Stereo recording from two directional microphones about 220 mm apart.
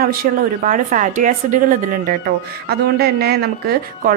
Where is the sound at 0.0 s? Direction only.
40° right (ahead or behind).